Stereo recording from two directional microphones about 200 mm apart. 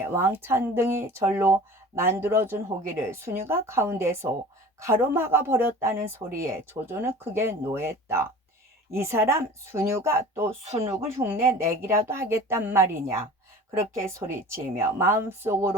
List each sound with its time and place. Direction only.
0.0 s speech: 10° right (ahead or behind)
10.6 s speech: 30° right (ahead or behind)
10.8 s speech: 10° right (ahead or behind)